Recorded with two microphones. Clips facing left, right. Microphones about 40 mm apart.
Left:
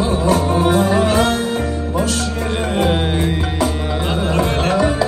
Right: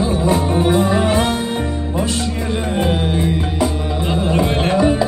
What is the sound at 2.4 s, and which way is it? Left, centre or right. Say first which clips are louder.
Music: left 2 dB; left.